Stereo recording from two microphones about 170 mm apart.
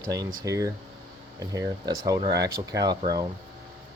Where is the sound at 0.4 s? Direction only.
20° right (ahead or behind).